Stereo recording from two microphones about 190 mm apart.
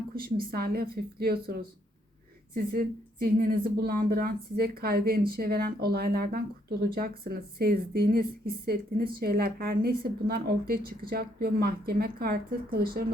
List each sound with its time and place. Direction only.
0.2 s a woman's voice: 50° right (ahead or behind)